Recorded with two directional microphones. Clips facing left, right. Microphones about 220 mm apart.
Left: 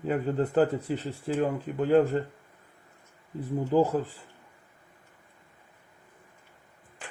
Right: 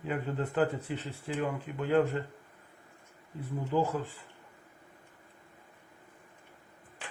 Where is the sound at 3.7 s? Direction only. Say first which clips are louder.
Left 6 dB; 40° left (ahead or behind).